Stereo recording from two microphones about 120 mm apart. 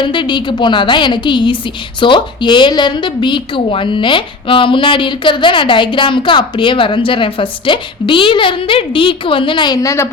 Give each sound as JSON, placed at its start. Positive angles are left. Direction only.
{"t": 0.0, "sound": "a woman's voice", "side_deg": 40}